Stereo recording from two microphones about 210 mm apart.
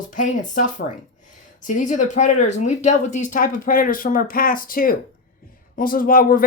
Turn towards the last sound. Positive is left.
turn(degrees=45)  # may be behind; listen again after turning